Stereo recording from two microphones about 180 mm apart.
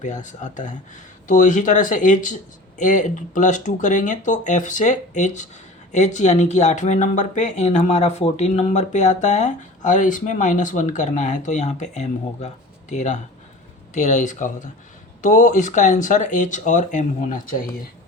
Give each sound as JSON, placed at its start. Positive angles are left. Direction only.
{"t": 0.0, "sound": "speech", "side_deg": 45}